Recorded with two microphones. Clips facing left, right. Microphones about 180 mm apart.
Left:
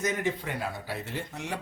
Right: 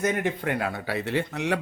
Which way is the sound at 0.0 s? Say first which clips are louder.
Right 4 dB; 55° right (ahead or behind).